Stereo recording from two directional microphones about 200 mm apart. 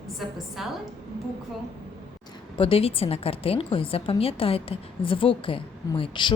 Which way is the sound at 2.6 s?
30° left (ahead or behind).